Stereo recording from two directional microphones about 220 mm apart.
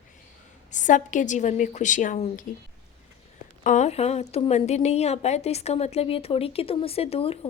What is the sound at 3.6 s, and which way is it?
A woman's voice, 35° left (ahead or behind).